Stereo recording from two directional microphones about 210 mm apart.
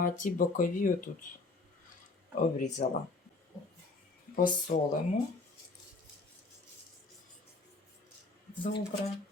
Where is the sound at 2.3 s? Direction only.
40° left (ahead or behind).